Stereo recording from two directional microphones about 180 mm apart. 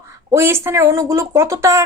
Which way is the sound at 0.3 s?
15° right (ahead or behind).